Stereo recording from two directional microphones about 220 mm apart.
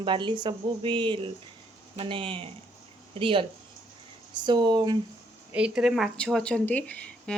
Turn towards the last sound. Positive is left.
turn(degrees=5)  # may be behind; listen again after turning